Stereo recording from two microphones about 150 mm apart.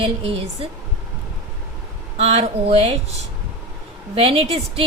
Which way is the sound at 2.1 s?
45° right (ahead or behind).